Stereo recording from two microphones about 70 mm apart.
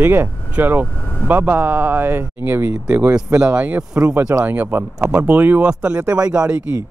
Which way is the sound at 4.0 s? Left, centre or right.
Right.